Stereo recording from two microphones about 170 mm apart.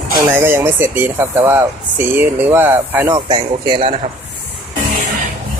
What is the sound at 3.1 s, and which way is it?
Speech, 30° right (ahead or behind).